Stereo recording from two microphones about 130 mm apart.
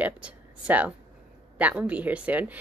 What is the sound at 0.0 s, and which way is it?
A woman's voice, 10° right (ahead or behind).